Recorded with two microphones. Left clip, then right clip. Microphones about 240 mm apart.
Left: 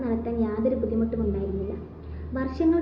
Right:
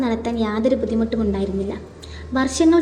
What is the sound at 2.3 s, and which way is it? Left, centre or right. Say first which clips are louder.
Speech: right 7 dB; right.